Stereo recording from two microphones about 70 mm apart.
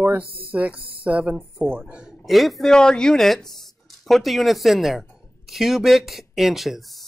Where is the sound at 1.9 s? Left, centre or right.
Centre.